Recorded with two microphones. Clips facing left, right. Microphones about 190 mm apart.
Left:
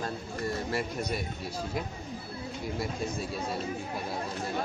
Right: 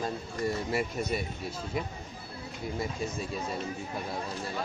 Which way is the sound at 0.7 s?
5° right (ahead or behind).